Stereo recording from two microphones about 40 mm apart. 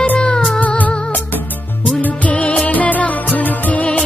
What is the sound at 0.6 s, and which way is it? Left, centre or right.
Music, left.